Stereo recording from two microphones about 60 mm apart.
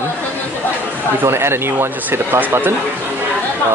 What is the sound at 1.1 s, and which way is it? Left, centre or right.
Speech, right.